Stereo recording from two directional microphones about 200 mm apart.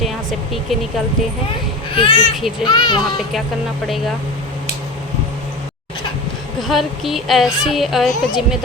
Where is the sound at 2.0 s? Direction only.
25° left (ahead or behind).